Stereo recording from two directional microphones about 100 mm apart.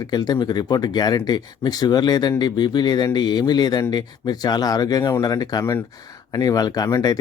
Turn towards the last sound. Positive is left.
turn(degrees=40)  # may be behind; listen again after turning